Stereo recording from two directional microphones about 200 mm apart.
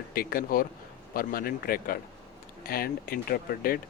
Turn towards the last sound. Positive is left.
turn(degrees=50)  # may be behind; listen again after turning